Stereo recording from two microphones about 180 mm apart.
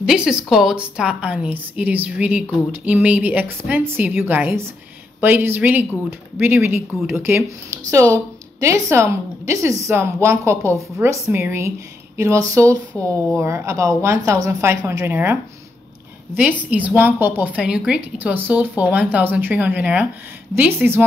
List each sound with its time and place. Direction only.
0.0 s a woman's voice: 5° right (ahead or behind)
12.9 s a woman's voice: 10° left (ahead or behind)
13.4 s a woman's voice: 15° right (ahead or behind)
16.7 s a woman's voice: 10° right (ahead or behind)